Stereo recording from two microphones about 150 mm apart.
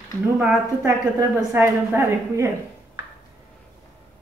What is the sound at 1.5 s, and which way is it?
A woman's voice, 15° right (ahead or behind).